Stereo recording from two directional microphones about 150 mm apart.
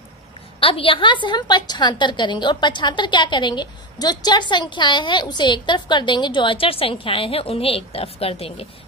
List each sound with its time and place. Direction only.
0.6 s a woman's voice: 40° left (ahead or behind)